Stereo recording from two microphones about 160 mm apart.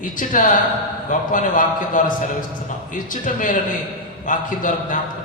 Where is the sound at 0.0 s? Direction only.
55° left (ahead or behind).